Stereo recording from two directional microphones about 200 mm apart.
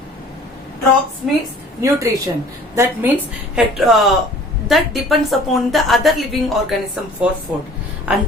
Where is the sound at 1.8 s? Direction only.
15° right (ahead or behind).